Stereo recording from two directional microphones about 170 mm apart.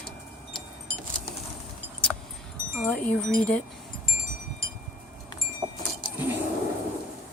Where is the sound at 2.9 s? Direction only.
5° left (ahead or behind).